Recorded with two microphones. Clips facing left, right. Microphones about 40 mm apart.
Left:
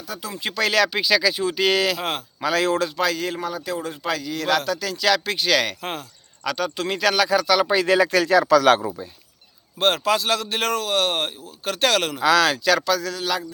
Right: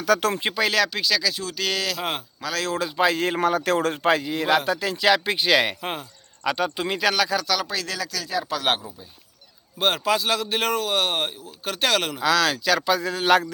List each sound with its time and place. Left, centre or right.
0.0 s speech: right
0.5 s a man's voice: centre
0.9 s speech: centre
3.2 s a man's voice: right
4.0 s speech: right; by 7.6 s centre
7.6 s speech: left
7.9 s speech: left
8.2 s speech: left
9.7 s a man's voice: centre
12.8 s speech: right